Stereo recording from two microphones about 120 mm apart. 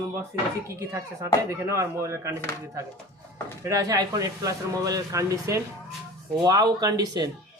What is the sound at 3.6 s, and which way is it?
Speech, 30° right (ahead or behind).